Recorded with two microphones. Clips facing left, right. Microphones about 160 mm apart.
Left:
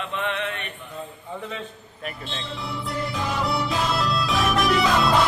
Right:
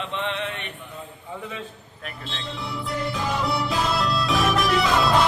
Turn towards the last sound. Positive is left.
turn(degrees=0)  # may be behind; listen again after turning